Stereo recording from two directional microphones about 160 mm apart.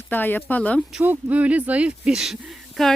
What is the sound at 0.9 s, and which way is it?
Speech, 10° right (ahead or behind).